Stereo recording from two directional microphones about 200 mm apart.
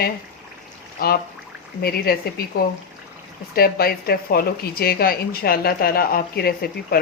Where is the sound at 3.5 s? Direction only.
50° left (ahead or behind).